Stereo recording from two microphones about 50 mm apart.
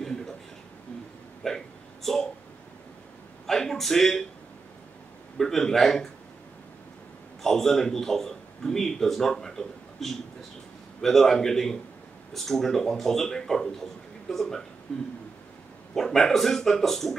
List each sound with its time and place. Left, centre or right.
1.4 s speech: centre
3.4 s a man's voice: centre
5.4 s speech: centre
7.4 s a man's voice: centre